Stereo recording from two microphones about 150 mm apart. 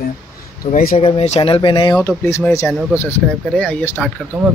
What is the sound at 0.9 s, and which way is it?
Speech, 40° left (ahead or behind).